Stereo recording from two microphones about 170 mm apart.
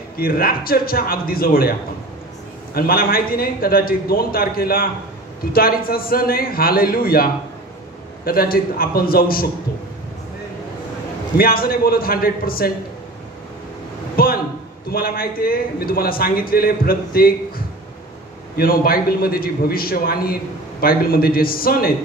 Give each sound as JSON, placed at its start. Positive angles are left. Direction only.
{"t": 0.2, "sound": "a man's voice", "side_deg": 60}
{"t": 8.3, "sound": "a man's voice", "side_deg": 60}
{"t": 11.3, "sound": "a man's voice", "side_deg": 60}
{"t": 14.1, "sound": "a sound", "side_deg": 60}
{"t": 14.9, "sound": "a man's voice", "side_deg": 60}
{"t": 18.6, "sound": "a man's voice", "side_deg": 60}